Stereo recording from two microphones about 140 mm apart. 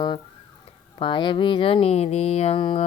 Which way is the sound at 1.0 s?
35° left (ahead or behind).